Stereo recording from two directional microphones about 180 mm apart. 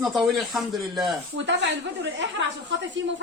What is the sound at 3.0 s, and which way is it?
Speech, 90° right.